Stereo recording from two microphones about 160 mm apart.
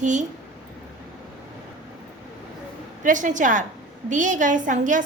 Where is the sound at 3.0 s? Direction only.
50° right (ahead or behind).